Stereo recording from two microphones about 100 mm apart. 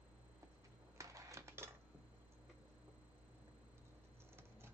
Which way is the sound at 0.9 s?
35° right (ahead or behind).